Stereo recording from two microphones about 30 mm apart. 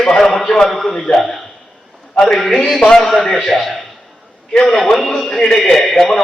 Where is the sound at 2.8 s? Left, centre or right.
Centre.